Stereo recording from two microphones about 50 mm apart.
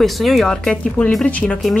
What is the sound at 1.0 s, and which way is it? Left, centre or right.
Speech, left.